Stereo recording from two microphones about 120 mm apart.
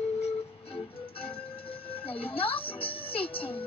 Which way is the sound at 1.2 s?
50° left (ahead or behind).